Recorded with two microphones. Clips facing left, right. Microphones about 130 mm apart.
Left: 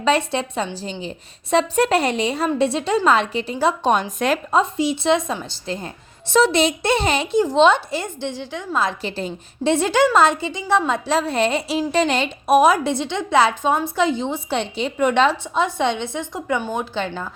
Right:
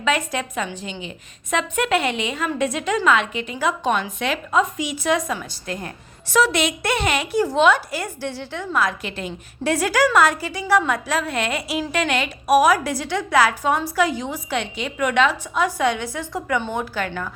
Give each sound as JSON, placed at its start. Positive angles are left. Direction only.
{"t": 0.0, "sound": "a woman's voice", "side_deg": 30}
{"t": 4.6, "sound": "a woman's voice", "side_deg": 30}